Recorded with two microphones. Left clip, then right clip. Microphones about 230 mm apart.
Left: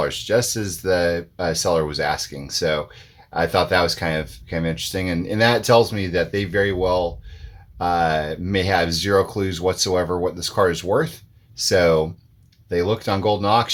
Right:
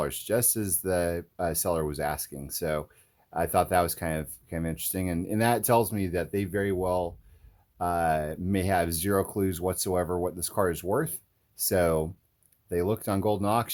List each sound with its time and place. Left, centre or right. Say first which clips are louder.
0.0 s speech: left 9 dB; right